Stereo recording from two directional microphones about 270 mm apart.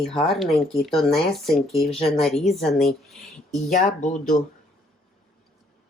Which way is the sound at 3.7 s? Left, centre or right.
Left.